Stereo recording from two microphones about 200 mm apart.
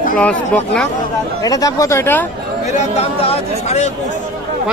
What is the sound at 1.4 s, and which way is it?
Speech, 15° left (ahead or behind).